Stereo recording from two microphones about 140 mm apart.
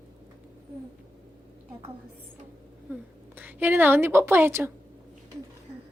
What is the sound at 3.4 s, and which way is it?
A woman's voice, 15° right (ahead or behind).